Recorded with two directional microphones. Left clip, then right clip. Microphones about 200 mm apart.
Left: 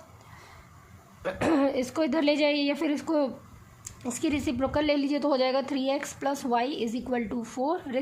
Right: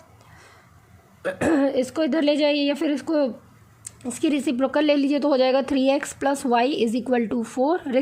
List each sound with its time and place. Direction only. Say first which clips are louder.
1.2 s a woman's voice: right 4 dB; 20° right (ahead or behind)